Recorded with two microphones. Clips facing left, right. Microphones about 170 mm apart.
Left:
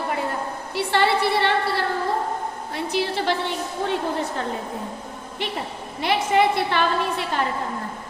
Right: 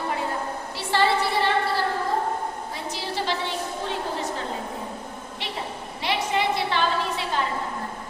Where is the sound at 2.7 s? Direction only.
65° left (ahead or behind).